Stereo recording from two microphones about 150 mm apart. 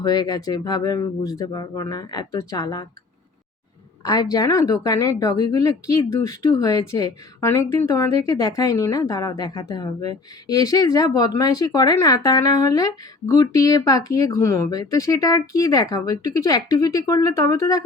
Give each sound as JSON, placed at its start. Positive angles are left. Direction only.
{"t": 0.0, "sound": "a woman's voice", "side_deg": 25}
{"t": 4.0, "sound": "a woman's voice", "side_deg": 25}